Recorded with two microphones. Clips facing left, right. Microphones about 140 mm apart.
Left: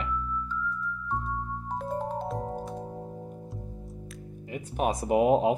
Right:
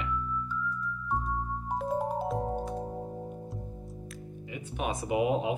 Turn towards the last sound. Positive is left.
turn(degrees=45)  # may be behind; listen again after turning